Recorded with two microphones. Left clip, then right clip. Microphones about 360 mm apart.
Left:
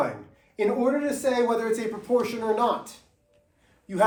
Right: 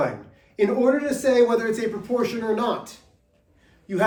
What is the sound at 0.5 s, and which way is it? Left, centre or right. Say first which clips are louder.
Speech: right 4 dB; centre.